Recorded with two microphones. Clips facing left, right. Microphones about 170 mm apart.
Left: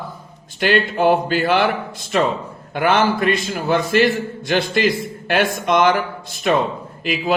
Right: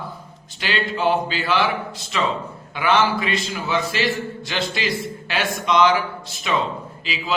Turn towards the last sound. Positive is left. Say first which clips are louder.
# left 7 dB
turn(degrees=55)  # may be behind; listen again after turning